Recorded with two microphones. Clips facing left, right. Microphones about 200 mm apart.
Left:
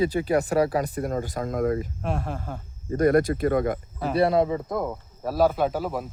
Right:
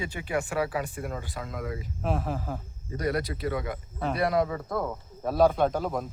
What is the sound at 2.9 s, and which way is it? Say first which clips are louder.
Speech: left 9 dB; 50° left (ahead or behind).